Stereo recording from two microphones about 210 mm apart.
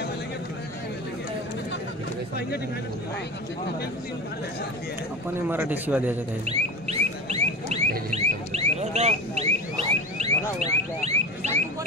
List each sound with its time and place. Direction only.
5.5 s speech: 10° right (ahead or behind)
6.4 s a sound: 30° right (ahead or behind)
8.1 s car alarm: 30° right (ahead or behind)